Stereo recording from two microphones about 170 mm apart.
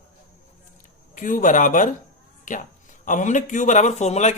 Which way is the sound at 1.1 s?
50° left (ahead or behind).